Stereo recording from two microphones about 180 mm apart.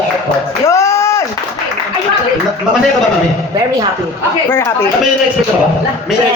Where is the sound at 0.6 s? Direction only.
15° left (ahead or behind).